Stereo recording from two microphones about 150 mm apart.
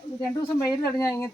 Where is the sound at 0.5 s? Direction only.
20° left (ahead or behind).